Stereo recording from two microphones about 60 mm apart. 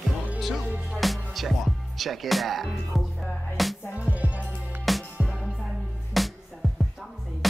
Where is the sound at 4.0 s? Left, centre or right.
Right.